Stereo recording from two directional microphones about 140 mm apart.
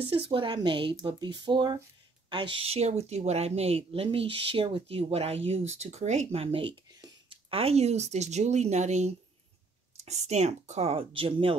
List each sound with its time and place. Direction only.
0.0 s speech: 40° right (ahead or behind)